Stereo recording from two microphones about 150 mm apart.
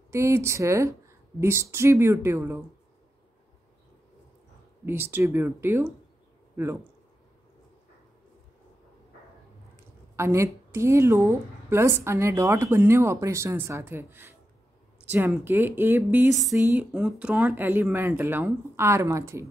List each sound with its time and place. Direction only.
0.1 s a woman's voice: 20° right (ahead or behind)
4.8 s a woman's voice: 15° right (ahead or behind)
10.1 s a woman's voice: 20° right (ahead or behind)